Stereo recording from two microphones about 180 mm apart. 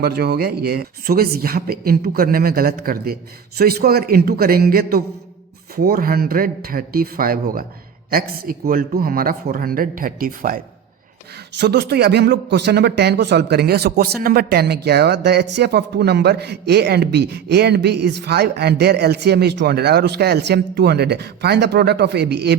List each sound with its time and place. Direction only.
0.0 s a man's voice: 60° right (ahead or behind)
11.5 s speech: 70° right (ahead or behind)